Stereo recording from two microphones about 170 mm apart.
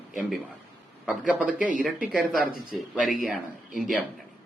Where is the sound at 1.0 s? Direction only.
5° right (ahead or behind).